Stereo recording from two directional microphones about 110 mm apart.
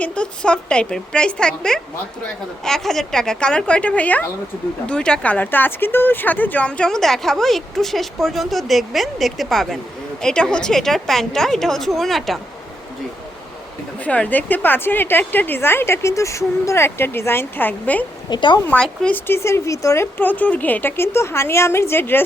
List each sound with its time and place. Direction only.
0.0 s a woman's voice: 10° left (ahead or behind)
14.0 s a woman's voice: 15° left (ahead or behind)
18.3 s speech: 45° left (ahead or behind)
18.8 s a woman's voice: 10° left (ahead or behind)
19.3 s a woman's voice: 25° left (ahead or behind)